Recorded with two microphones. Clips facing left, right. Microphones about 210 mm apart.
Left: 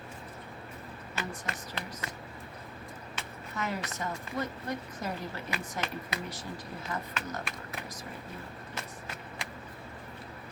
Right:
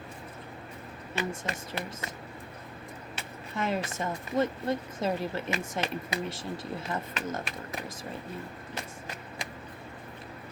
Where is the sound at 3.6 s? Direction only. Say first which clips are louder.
Right 5 dB; 25° right (ahead or behind).